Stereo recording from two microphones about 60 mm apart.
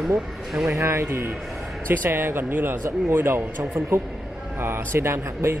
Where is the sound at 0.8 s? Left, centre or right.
Right.